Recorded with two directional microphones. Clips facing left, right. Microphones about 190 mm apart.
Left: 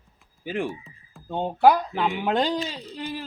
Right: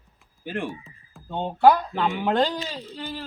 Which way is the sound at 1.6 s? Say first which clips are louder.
Right 1 dB; 15° left (ahead or behind).